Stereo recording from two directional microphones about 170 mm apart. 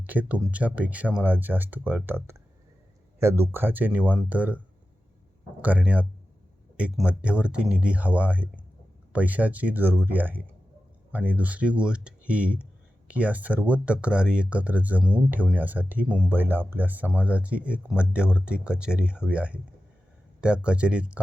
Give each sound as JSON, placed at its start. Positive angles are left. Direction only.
{"t": 0.0, "sound": "speech", "side_deg": -10}
{"t": 5.6, "sound": "speech", "side_deg": -10}